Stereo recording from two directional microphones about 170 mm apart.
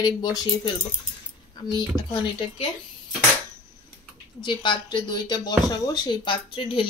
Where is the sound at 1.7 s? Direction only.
25° left (ahead or behind).